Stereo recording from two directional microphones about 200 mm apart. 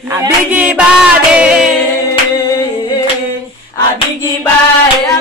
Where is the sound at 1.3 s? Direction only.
5° right (ahead or behind).